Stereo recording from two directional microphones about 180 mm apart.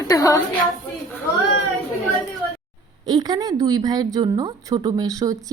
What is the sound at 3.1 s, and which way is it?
A woman's voice, 20° right (ahead or behind).